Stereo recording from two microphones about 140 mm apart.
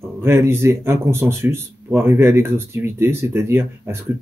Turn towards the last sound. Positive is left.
turn(degrees=-20)  # may be behind; listen again after turning